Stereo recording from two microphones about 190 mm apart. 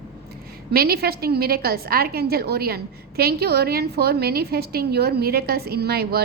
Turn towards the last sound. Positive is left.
turn(degrees=-55)  # may be behind; listen again after turning